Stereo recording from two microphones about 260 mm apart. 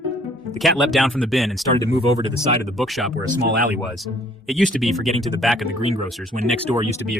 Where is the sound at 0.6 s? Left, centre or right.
Centre.